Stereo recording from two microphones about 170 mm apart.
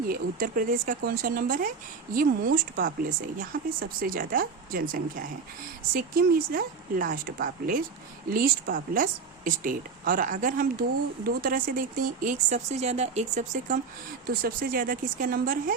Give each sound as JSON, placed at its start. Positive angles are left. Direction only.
{"t": 0.1, "sound": "speech", "side_deg": -55}
{"t": 14.3, "sound": "speech", "side_deg": -60}